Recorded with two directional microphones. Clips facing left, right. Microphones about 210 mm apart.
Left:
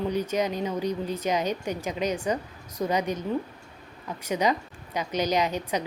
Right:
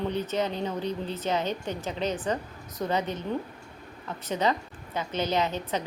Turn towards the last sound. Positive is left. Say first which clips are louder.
# left 2 dB
turn(degrees=15)  # may be behind; listen again after turning